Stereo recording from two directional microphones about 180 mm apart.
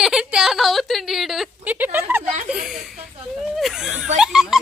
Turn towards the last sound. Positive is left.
turn(degrees=-5)  # may be behind; listen again after turning